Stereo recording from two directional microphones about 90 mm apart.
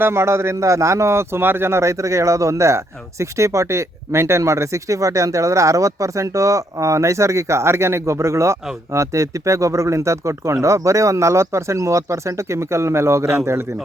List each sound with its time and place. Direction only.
0.0 s a man's voice: 30° right (ahead or behind)